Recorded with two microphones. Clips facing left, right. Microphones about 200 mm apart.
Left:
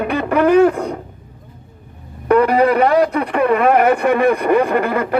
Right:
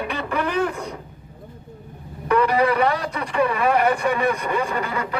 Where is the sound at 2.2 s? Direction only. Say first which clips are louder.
Left 6 dB; 55° left (ahead or behind).